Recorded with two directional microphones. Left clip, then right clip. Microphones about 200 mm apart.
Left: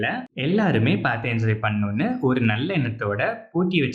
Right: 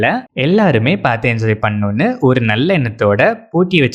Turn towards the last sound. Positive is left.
turn(degrees=-45)  # may be behind; listen again after turning